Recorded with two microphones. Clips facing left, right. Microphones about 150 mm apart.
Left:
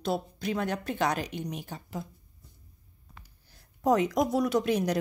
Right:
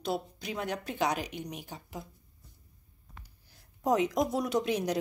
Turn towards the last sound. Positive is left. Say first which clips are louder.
# left 3 dB
turn(degrees=-20)  # may be behind; listen again after turning